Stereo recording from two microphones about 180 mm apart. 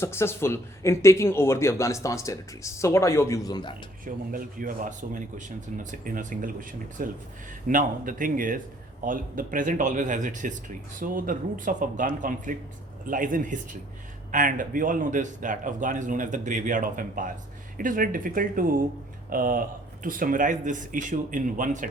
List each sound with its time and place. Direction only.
0.0 s speech: 15° left (ahead or behind)
4.0 s speech: 50° right (ahead or behind)